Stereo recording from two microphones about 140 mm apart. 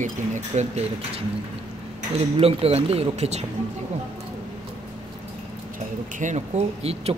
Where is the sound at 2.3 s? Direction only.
45° right (ahead or behind).